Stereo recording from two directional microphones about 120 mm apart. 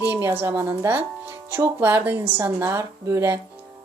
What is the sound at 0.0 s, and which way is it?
A woman's voice, 15° right (ahead or behind).